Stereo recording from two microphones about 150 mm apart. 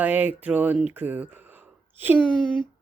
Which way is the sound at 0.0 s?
10° right (ahead or behind).